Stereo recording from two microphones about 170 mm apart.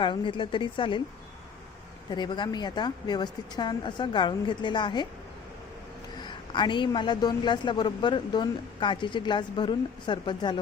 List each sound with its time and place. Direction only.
0.0 s a man's voice: 30° left (ahead or behind)
2.0 s a man's voice: 25° left (ahead or behind)
6.1 s a man's voice: 25° left (ahead or behind)